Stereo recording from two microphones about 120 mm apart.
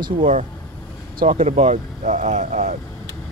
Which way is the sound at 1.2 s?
60° right (ahead or behind).